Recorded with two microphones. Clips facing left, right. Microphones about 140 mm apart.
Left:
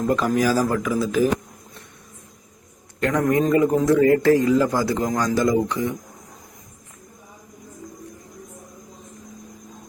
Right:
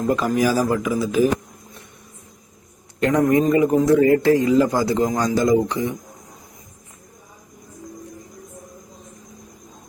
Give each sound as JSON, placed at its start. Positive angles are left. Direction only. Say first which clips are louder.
{"t": 0.0, "sound": "speech", "louder": "right 1 dB", "side_deg": -5}
{"t": 3.0, "sound": "speech", "louder": "right 3 dB", "side_deg": -20}